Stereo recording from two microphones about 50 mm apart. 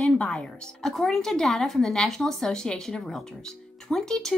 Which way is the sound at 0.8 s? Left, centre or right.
Centre.